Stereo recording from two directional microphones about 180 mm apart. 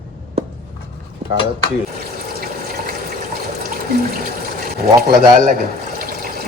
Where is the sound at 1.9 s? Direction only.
55° right (ahead or behind).